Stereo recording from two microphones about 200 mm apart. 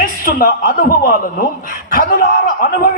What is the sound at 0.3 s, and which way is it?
Speech, 45° left (ahead or behind).